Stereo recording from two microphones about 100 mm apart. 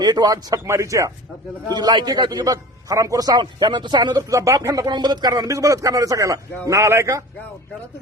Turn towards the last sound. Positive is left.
turn(degrees=-30)  # may be behind; listen again after turning